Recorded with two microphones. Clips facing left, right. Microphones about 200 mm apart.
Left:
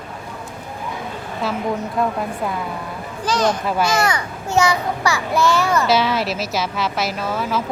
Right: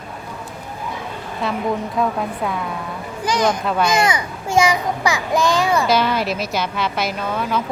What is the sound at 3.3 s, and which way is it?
A child's voice, 15° right (ahead or behind).